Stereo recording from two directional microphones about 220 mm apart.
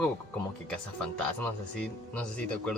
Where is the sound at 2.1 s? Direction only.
5° left (ahead or behind).